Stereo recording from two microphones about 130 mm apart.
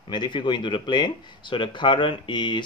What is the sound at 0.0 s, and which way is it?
Speech, 35° left (ahead or behind).